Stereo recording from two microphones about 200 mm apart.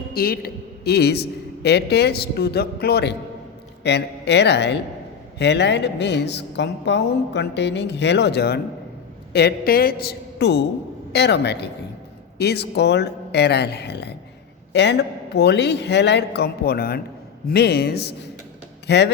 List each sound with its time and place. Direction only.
0.1 s a man's voice: 50° left (ahead or behind)